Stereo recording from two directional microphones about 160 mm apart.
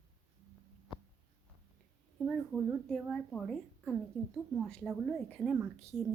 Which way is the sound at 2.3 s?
5° right (ahead or behind).